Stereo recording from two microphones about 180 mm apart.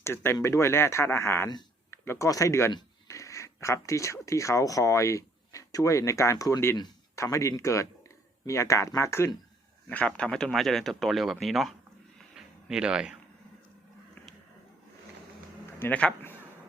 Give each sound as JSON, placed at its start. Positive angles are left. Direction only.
{"t": 0.0, "sound": "speech", "side_deg": 15}
{"t": 12.4, "sound": "a sound", "side_deg": -5}
{"t": 15.8, "sound": "speech", "side_deg": 5}